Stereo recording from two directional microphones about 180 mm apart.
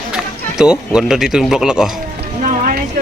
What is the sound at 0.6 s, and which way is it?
Speech, 5° right (ahead or behind).